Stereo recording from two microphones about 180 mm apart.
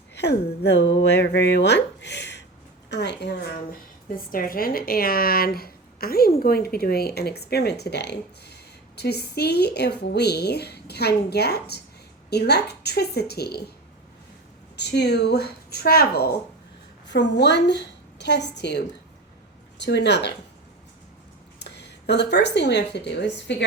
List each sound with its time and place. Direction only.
0.1 s speech: 70° left (ahead or behind)
4.1 s a woman's voice: 55° left (ahead or behind)
14.8 s a woman's voice: 65° left (ahead or behind)
17.1 s speech: 75° left (ahead or behind)
21.6 s speech: 70° left (ahead or behind)